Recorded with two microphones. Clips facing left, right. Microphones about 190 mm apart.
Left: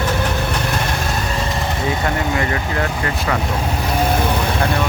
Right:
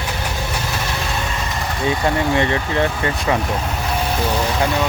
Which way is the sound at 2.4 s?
25° right (ahead or behind).